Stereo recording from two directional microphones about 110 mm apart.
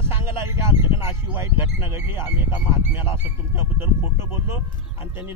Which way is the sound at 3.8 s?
25° right (ahead or behind).